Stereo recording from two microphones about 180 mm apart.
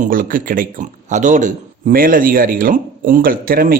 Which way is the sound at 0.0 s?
50° right (ahead or behind).